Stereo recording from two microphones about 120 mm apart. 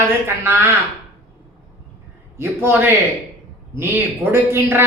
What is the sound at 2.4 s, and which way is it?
A man's voice, 20° right (ahead or behind).